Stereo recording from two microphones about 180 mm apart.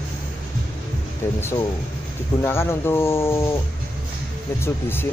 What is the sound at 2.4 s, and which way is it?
Speech, 15° left (ahead or behind).